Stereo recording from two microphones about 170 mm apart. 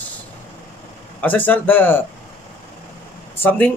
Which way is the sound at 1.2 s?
10° left (ahead or behind).